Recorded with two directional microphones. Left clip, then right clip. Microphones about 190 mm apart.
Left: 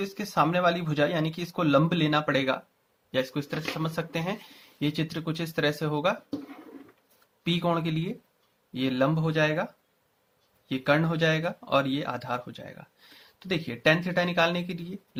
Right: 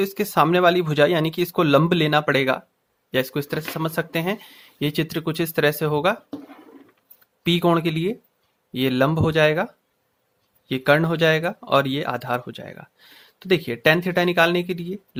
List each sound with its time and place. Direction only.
0.0 s speech: 50° right (ahead or behind)
7.4 s speech: 50° right (ahead or behind)
10.7 s speech: 45° right (ahead or behind)